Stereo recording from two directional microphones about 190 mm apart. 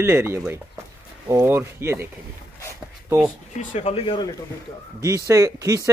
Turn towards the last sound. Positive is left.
turn(degrees=-15)  # may be behind; listen again after turning